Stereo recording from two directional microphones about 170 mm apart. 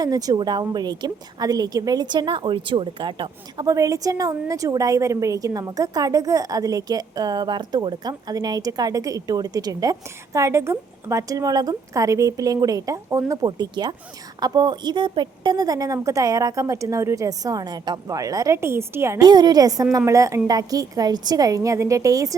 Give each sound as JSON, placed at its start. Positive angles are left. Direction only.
{"t": 0.0, "sound": "a woman's voice", "side_deg": -20}